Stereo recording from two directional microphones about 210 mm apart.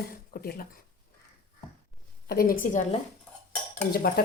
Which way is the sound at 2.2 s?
45° left (ahead or behind).